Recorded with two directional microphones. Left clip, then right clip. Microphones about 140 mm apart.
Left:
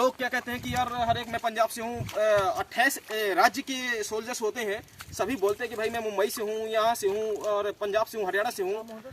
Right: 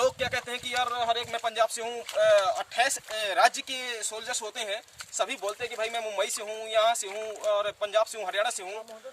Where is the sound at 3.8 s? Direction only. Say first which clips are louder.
Left 4 dB; 60° right (ahead or behind).